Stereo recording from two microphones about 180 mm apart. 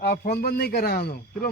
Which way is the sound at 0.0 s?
60° left (ahead or behind).